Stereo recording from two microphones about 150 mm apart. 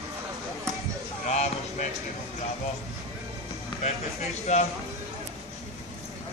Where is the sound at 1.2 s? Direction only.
50° left (ahead or behind).